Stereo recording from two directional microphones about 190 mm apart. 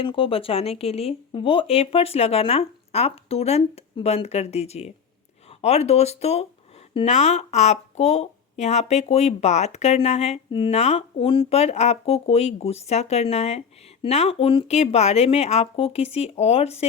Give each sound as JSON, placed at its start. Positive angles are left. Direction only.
{"t": 0.0, "sound": "speech", "side_deg": 25}